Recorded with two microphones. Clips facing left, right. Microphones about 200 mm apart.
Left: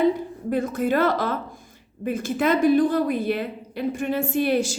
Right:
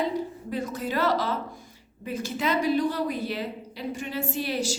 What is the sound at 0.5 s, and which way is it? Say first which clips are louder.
A woman's voice: left 7 dB; 55° left (ahead or behind).